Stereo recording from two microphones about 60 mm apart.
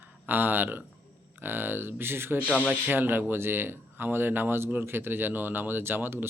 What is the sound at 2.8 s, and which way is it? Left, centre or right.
Speech, right.